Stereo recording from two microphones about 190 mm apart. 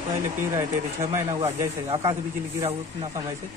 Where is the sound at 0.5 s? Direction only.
15° right (ahead or behind).